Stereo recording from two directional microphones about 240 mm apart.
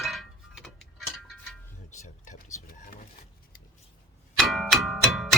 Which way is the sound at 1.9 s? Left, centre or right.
Left.